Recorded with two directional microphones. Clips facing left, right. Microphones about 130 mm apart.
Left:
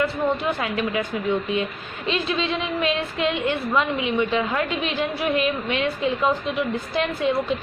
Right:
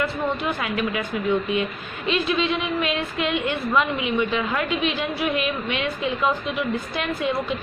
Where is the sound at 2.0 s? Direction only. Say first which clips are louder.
Right 2 dB; 30° left (ahead or behind).